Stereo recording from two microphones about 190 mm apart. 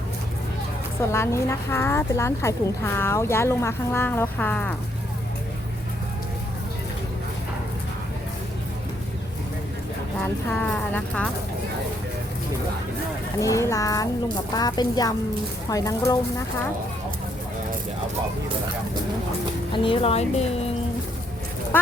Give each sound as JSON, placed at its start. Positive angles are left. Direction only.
{"t": 1.0, "sound": "a woman's voice", "side_deg": 15}
{"t": 10.5, "sound": "a woman's voice", "side_deg": 5}
{"t": 13.4, "sound": "a woman's voice", "side_deg": 15}
{"t": 19.7, "sound": "a woman's voice", "side_deg": 25}